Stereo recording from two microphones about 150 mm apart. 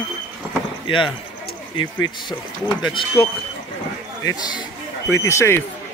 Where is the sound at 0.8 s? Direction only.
35° left (ahead or behind).